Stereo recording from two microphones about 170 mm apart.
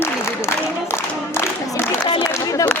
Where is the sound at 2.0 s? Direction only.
30° left (ahead or behind).